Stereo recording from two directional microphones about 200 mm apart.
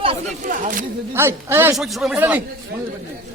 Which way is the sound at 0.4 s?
40° right (ahead or behind).